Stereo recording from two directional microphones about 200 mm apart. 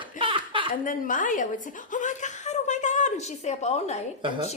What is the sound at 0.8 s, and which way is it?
Chuckle, 40° left (ahead or behind).